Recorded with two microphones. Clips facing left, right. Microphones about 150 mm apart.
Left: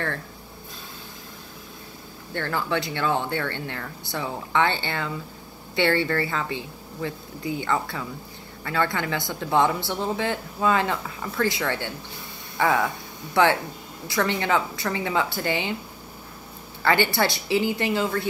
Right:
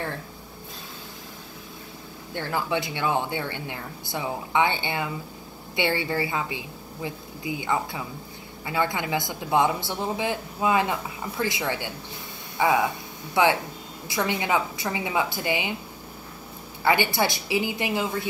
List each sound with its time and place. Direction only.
2.3 s speech: 15° right (ahead or behind)
16.8 s speech: 15° right (ahead or behind)